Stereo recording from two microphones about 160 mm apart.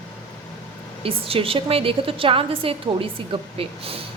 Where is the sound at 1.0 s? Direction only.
35° right (ahead or behind).